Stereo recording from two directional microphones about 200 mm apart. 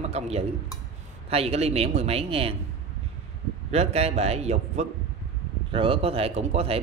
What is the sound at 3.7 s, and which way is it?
A man's voice, 30° right (ahead or behind).